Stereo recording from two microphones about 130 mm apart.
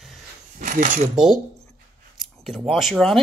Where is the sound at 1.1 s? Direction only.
5° right (ahead or behind).